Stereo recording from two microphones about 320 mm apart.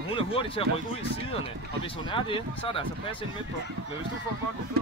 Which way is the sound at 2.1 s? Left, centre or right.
Centre.